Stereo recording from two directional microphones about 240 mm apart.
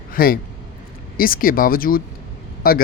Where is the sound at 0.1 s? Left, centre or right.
Left.